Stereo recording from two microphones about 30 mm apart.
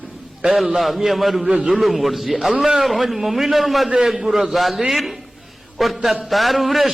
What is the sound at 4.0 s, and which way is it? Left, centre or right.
A man's voice, centre.